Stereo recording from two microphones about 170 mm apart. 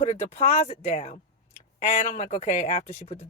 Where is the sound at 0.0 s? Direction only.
40° left (ahead or behind).